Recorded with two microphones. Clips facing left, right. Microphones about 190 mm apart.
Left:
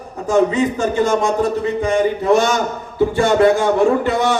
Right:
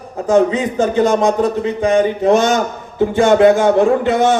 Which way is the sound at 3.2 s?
20° right (ahead or behind).